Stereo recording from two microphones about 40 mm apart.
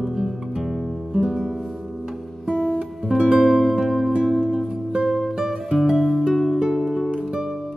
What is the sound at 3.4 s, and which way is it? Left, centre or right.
Music, centre.